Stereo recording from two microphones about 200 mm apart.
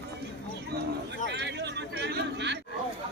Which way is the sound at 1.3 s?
60° right (ahead or behind).